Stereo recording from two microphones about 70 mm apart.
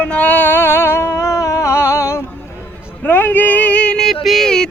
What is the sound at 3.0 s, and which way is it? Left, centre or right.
Speech, left.